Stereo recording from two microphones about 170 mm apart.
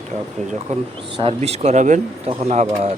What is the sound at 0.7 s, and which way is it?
Speech, 40° right (ahead or behind).